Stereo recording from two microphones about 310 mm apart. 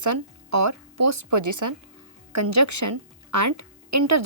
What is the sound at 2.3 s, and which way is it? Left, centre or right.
A woman's voice, right.